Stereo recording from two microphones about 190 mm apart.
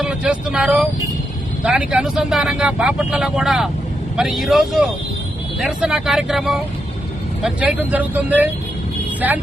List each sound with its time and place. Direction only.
0.0 s speech: 5° right (ahead or behind)